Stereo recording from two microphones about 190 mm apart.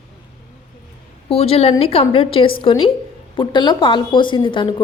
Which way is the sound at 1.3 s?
30° left (ahead or behind).